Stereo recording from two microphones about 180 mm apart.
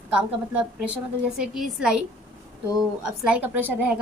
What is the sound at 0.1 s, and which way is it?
A woman's voice, 5° right (ahead or behind).